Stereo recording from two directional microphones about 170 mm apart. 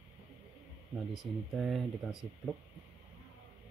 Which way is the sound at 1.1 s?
Centre (ahead or behind).